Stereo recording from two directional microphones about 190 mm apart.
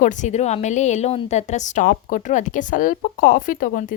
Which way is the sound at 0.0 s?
40° left (ahead or behind).